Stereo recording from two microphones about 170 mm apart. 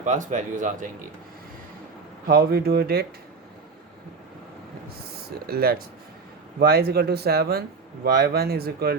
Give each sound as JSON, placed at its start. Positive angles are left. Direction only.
{"t": 0.0, "sound": "speech", "side_deg": -45}
{"t": 2.2, "sound": "speech", "side_deg": -60}
{"t": 5.5, "sound": "speech", "side_deg": -65}